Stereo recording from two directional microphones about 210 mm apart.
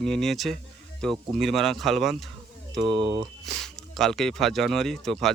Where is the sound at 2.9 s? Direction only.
25° right (ahead or behind).